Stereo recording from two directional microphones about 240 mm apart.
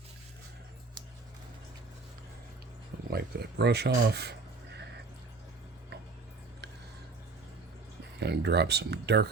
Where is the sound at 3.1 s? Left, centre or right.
Right.